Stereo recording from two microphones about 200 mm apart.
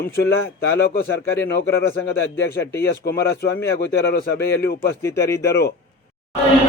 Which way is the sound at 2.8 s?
55° left (ahead or behind).